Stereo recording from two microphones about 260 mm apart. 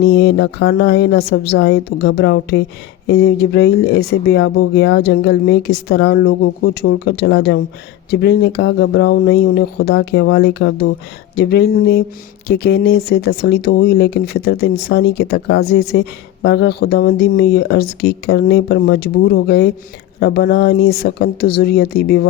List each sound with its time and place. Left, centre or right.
0.0 s speech: left